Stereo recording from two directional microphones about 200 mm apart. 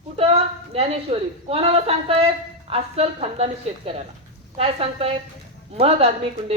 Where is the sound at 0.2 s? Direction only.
30° right (ahead or behind).